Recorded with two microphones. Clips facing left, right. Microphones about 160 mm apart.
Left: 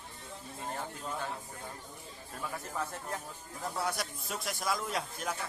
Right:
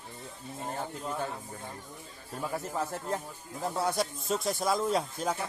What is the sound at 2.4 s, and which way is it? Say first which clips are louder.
A man's voice: right 5 dB; 25° right (ahead or behind).